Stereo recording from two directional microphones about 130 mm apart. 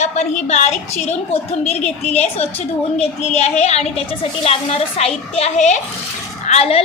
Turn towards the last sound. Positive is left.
turn(degrees=50)  # may be behind; listen again after turning